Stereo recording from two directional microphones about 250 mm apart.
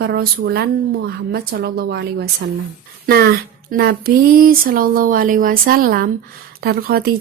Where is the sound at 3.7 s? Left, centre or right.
Right.